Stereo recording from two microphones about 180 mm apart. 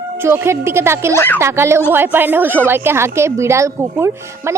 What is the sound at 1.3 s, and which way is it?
Speech, 15° right (ahead or behind).